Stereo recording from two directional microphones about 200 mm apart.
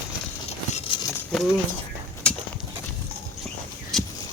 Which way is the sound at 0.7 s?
30° left (ahead or behind).